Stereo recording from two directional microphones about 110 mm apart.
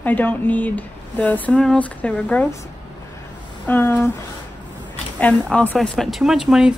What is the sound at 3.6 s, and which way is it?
Speech, 20° left (ahead or behind).